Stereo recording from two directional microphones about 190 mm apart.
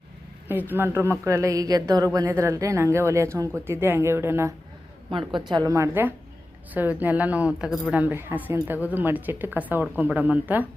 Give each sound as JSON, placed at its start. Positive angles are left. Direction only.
{"t": 0.7, "sound": "speech", "side_deg": -10}
{"t": 5.1, "sound": "speech", "side_deg": -25}